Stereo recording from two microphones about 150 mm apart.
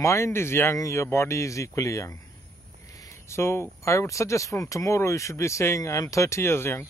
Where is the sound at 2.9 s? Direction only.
20° left (ahead or behind).